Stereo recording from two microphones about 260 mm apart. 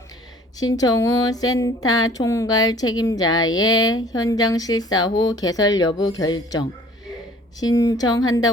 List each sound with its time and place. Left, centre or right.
0.6 s speech: centre